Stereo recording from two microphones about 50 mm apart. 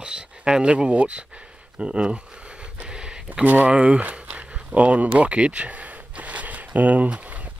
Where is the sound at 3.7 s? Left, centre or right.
Right.